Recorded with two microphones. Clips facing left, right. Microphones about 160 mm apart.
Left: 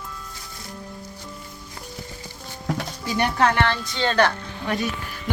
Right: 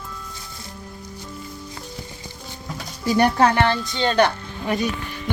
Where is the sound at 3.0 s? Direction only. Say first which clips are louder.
Right 4 dB; 35° right (ahead or behind).